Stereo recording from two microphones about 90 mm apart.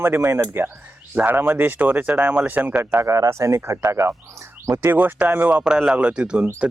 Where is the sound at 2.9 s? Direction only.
35° right (ahead or behind).